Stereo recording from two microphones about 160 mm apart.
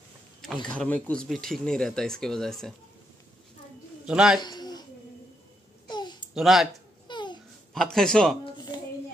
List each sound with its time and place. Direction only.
0.7 s speech: 10° left (ahead or behind)
4.1 s speech: 5° right (ahead or behind)
4.4 s a sound: 25° left (ahead or behind)
5.9 s babbling: 25° left (ahead or behind)
6.3 s speech: centre (ahead or behind)
7.1 s babbling: 30° left (ahead or behind)
7.7 s speech: 5° left (ahead or behind)
8.5 s a sound: 25° left (ahead or behind)